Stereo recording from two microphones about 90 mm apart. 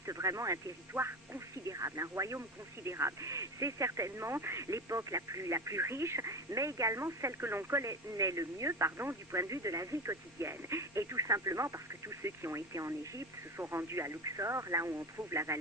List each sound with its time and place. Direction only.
0.0 s speech: 35° right (ahead or behind)